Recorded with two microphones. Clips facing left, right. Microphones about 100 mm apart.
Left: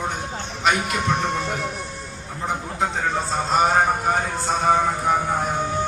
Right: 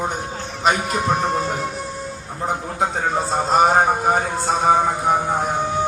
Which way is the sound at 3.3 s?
25° right (ahead or behind).